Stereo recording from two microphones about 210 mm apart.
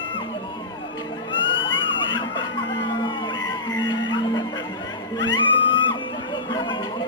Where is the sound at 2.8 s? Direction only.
20° left (ahead or behind).